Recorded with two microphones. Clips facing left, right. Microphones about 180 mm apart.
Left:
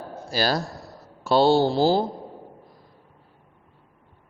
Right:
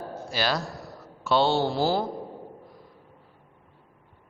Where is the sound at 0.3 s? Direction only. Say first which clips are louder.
Left 4 dB; 35° left (ahead or behind).